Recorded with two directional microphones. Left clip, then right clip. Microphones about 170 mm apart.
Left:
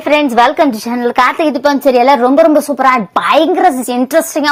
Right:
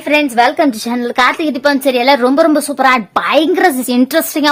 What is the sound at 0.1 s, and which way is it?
A woman's voice, 5° left (ahead or behind).